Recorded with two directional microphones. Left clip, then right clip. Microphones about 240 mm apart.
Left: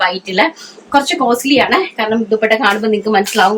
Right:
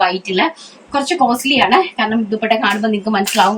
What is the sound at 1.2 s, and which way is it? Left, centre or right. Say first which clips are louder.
Speech: right 4 dB; left.